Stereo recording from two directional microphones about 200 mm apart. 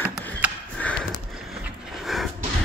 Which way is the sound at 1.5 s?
Centre (ahead or behind).